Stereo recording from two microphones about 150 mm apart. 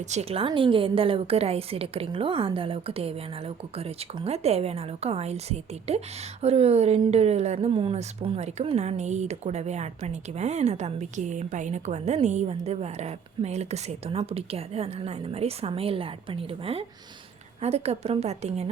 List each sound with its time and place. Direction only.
0.1 s a woman's voice: 45° right (ahead or behind)